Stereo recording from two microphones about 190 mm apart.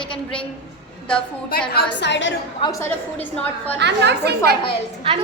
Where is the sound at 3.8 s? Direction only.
65° right (ahead or behind).